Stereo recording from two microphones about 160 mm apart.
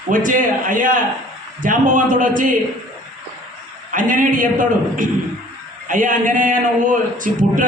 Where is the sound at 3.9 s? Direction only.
55° right (ahead or behind).